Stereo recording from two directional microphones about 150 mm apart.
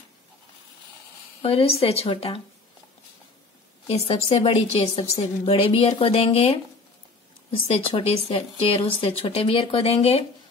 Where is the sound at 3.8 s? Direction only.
40° left (ahead or behind).